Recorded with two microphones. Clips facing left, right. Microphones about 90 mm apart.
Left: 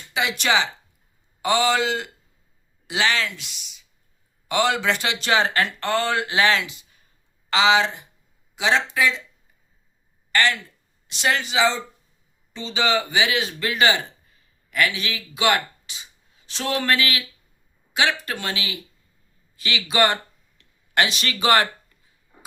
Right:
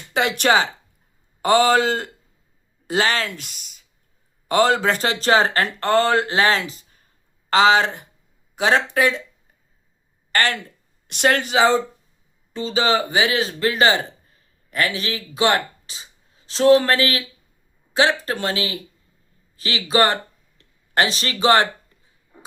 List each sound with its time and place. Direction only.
0.1 s speech: 55° right (ahead or behind)
10.3 s speech: 50° right (ahead or behind); by 21.7 s 25° right (ahead or behind)